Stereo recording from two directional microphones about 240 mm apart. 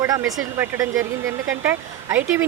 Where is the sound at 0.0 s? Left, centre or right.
Centre.